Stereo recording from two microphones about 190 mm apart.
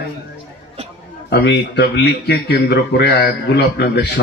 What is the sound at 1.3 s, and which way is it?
A man's voice, 60° left (ahead or behind).